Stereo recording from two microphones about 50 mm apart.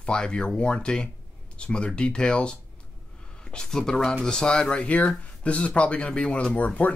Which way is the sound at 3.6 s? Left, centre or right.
Centre.